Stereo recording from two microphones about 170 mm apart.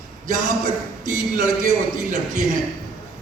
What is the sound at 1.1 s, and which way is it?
A man's voice, 50° right (ahead or behind).